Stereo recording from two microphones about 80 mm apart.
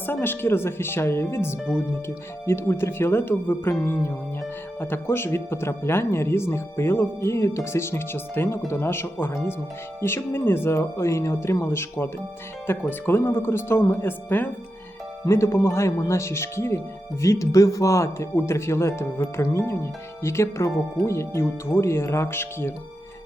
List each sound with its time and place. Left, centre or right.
0.0 s speech: left
15.2 s speech: left